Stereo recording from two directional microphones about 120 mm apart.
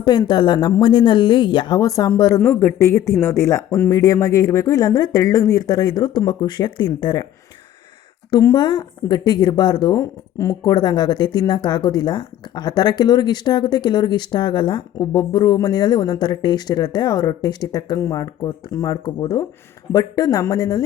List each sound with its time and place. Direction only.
0.0 s speech: 35° left (ahead or behind)
2.4 s speech: 20° left (ahead or behind); by 7.3 s 35° left (ahead or behind)
8.3 s speech: 30° left (ahead or behind)